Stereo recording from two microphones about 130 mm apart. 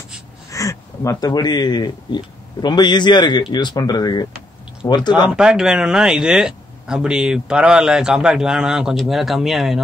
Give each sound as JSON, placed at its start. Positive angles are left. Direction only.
{"t": 0.5, "sound": "speech", "side_deg": 25}
{"t": 5.3, "sound": "speech", "side_deg": -5}